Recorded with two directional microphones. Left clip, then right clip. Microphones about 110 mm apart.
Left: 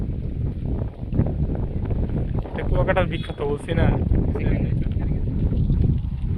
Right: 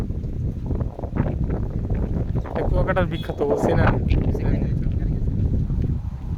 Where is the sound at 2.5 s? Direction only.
40° right (ahead or behind).